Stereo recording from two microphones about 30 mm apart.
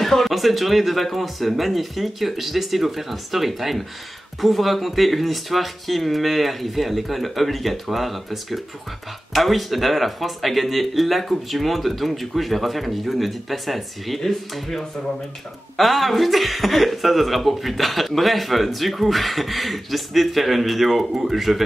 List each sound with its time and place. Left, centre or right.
0.0 s speech: centre